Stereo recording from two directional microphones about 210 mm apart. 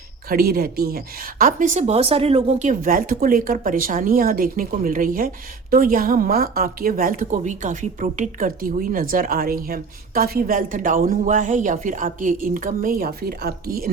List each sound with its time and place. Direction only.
0.3 s a woman's voice: 45° right (ahead or behind)